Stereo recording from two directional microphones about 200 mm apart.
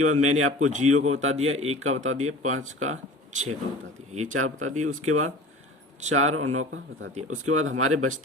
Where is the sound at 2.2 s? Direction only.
90° right.